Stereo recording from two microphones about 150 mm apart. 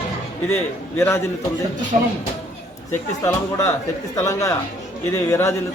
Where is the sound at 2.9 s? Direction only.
20° left (ahead or behind).